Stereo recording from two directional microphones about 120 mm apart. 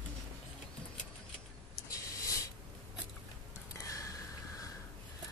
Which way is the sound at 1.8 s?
30° left (ahead or behind).